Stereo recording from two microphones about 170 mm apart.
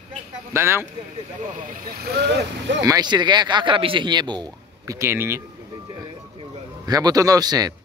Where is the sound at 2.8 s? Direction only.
25° right (ahead or behind).